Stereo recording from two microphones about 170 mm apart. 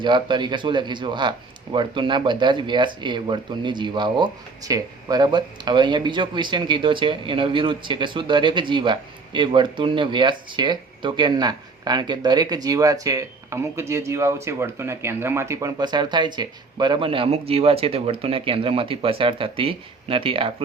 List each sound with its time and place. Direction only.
0.0 s speech: 25° right (ahead or behind)